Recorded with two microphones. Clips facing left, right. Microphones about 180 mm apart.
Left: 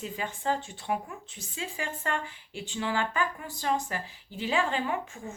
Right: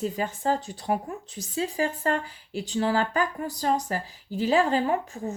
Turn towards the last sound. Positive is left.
turn(degrees=-40)  # may be behind; listen again after turning